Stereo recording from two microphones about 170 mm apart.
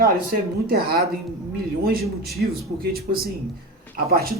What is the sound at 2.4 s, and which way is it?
Speech, 65° right (ahead or behind).